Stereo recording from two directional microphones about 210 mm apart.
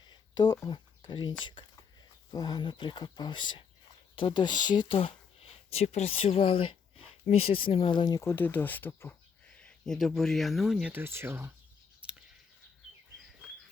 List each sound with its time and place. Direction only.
0.0 s a sound: 20° left (ahead or behind)
2.3 s speech: 20° left (ahead or behind); by 11.5 s 10° right (ahead or behind)
11.9 s scissors: 5° right (ahead or behind)